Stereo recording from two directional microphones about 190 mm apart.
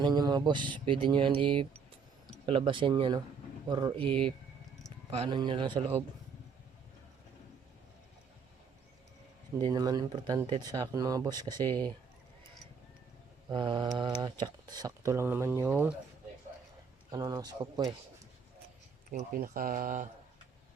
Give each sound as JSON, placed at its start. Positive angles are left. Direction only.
{"t": 0.0, "sound": "speech", "side_deg": -20}
{"t": 9.6, "sound": "speech", "side_deg": -20}
{"t": 11.6, "sound": "speech", "side_deg": 10}
{"t": 13.5, "sound": "speech", "side_deg": -25}
{"t": 17.1, "sound": "speech", "side_deg": -20}
{"t": 19.1, "sound": "speech", "side_deg": -50}